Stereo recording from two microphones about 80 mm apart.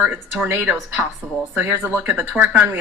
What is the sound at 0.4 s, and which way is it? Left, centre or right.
A woman's voice, right.